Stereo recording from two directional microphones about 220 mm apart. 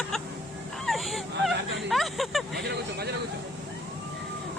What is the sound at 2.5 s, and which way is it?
Speech, 50° right (ahead or behind).